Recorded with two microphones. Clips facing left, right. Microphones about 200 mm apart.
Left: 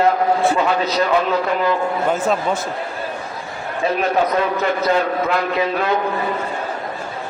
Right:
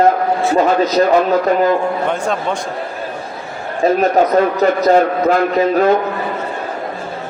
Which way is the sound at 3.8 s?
40° right (ahead or behind).